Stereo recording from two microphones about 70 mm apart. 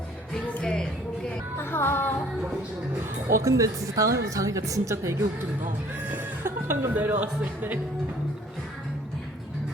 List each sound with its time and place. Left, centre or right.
0.6 s music: centre
1.5 s music: left
3.4 s a woman's voice: right
6.1 s music: right
6.9 s speech: right